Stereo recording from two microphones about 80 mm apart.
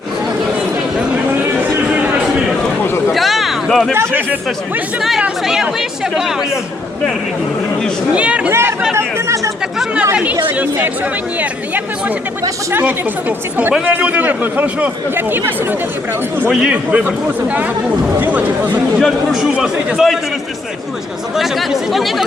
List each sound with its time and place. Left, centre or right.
3.1 s a sound: centre
3.9 s a man's voice: right
8.1 s a man's voice: centre
9.0 s speech: right
9.7 s a man's voice: centre
11.3 s a man's voice: right
16.5 s a man's voice: centre
18.9 s a man's voice: centre
21.3 s a man's voice: centre